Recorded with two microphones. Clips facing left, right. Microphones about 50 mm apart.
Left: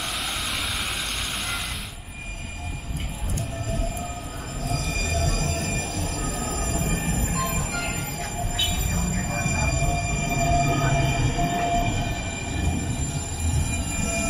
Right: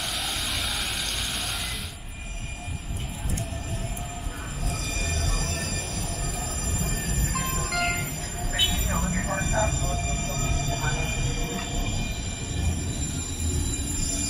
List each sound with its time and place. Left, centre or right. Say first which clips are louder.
5.1 s music: left 5 dB; left
8.5 s train: right 4 dB; right
9.7 s a sound: left 4 dB; left
10.1 s train: left 8 dB; left
13.7 s train: left 5 dB; left